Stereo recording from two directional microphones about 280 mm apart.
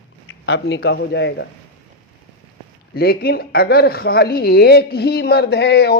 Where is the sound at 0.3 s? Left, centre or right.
Left.